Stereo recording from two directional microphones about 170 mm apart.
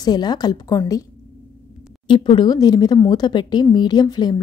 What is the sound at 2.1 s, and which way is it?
A woman's voice, 30° left (ahead or behind).